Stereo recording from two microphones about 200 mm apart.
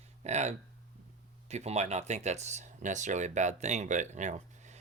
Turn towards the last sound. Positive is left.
turn(degrees=-35)  # may be behind; listen again after turning